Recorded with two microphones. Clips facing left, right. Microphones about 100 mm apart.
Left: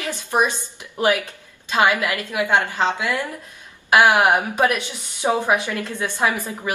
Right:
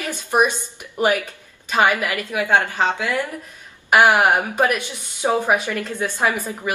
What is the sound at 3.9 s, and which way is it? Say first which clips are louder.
A woman's voice: even; 15° left (ahead or behind).